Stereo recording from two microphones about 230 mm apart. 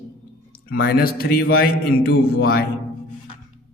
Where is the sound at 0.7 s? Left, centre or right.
Left.